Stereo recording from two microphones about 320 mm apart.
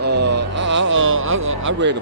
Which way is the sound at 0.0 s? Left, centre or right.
Right.